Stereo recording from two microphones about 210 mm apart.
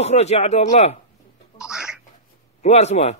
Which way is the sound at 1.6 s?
5° right (ahead or behind).